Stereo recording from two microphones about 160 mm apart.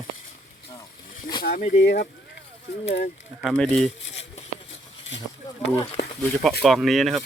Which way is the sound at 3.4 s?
Centre (ahead or behind).